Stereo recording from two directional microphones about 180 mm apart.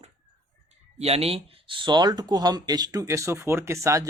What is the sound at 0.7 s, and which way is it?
Speech, 35° right (ahead or behind).